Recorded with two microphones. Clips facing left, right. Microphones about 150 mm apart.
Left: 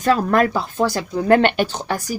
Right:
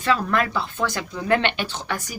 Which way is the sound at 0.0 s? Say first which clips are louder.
Left 5 dB; 45° left (ahead or behind).